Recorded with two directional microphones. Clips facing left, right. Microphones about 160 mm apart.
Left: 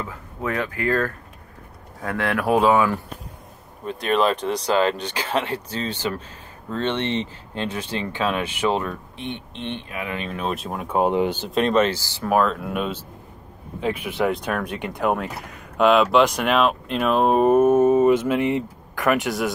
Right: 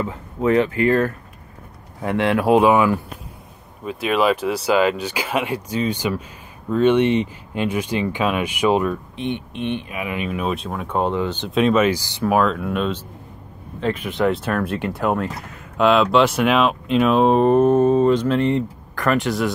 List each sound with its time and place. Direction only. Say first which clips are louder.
0.1 s speech: right 9 dB; 25° right (ahead or behind)
10.5 s speech: right 1 dB; centre (ahead or behind)
11.4 s speech: right 6 dB; centre (ahead or behind)
12.3 s speech: right 2 dB; centre (ahead or behind)
14.3 s speech: right 3 dB; 5° right (ahead or behind); by 18.6 s 15° left (ahead or behind)
18.9 s speech: right 1 dB; centre (ahead or behind)